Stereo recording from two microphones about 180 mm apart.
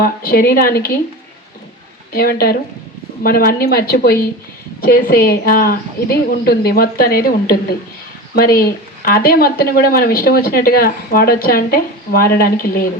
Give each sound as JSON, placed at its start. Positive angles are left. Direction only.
{"t": 0.0, "sound": "speech", "side_deg": 55}
{"t": 2.1, "sound": "speech", "side_deg": 55}